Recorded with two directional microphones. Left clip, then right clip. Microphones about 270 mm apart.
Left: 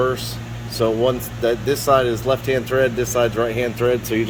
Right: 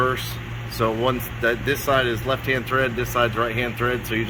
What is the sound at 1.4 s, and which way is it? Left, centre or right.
Speech, centre.